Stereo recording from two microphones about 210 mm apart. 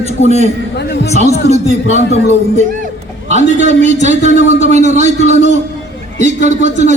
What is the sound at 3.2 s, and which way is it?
A man's voice, 35° right (ahead or behind).